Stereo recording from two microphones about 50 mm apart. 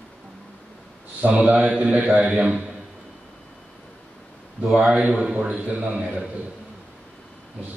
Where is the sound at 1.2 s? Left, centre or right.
Right.